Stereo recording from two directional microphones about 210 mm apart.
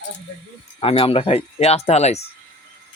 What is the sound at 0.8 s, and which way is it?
Speech, 25° left (ahead or behind).